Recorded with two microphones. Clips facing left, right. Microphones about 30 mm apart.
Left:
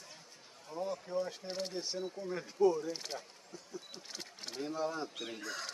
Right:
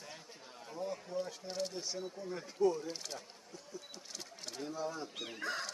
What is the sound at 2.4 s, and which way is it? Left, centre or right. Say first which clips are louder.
Speech: left 3 dB; centre.